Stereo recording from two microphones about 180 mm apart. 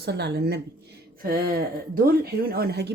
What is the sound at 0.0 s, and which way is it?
Speech, 65° right (ahead or behind).